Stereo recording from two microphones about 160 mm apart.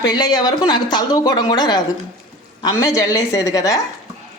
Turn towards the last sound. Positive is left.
turn(degrees=20)  # may be behind; listen again after turning